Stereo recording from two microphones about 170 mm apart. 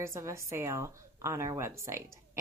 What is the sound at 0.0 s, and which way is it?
Speech, 15° right (ahead or behind).